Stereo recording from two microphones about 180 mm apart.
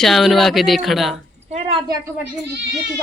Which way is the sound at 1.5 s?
35° right (ahead or behind).